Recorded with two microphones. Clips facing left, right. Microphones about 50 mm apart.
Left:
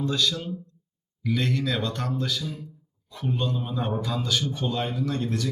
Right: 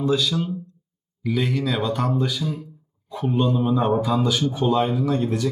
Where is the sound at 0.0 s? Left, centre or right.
Centre.